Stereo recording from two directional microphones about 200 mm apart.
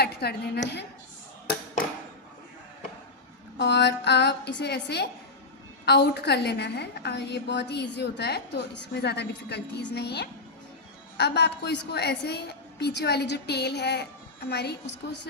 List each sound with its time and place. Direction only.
0.0 s a woman's voice: 55° left (ahead or behind)
3.6 s a woman's voice: 60° left (ahead or behind)